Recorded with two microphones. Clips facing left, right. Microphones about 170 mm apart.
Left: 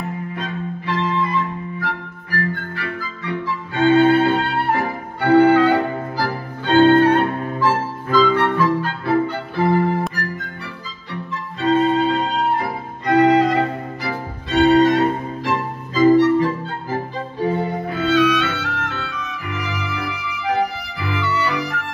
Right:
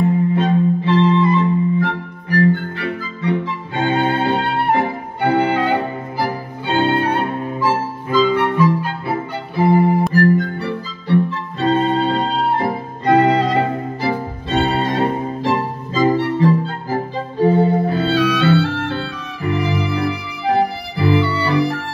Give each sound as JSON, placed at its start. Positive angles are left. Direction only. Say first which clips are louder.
{"t": 0.3, "sound": "music", "louder": "right 11 dB", "side_deg": -25}
{"t": 10.1, "sound": "music", "louder": "right 14 dB", "side_deg": -35}
{"t": 16.3, "sound": "violin", "louder": "right 3 dB", "side_deg": -30}